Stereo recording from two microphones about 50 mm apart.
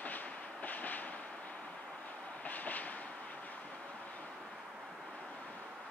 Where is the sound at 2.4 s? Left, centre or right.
Left.